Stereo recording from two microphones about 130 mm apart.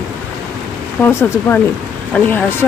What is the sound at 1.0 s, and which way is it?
Speech, 15° left (ahead or behind).